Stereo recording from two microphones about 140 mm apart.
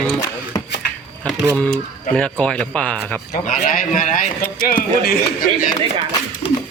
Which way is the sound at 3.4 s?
70° left (ahead or behind).